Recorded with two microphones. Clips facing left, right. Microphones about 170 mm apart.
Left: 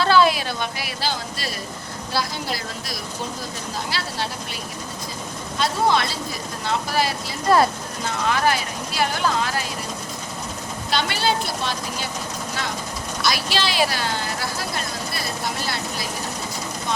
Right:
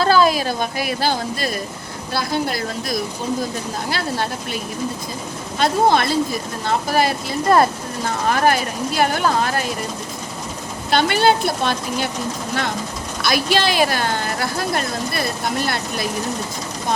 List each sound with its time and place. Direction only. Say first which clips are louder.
0.0 s speech: right 2 dB; 40° right (ahead or behind)
5.5 s speech: right 4 dB; 55° right (ahead or behind)
10.9 s speech: right 7 dB; 55° right (ahead or behind)
13.2 s speech: right 6 dB; 50° right (ahead or behind)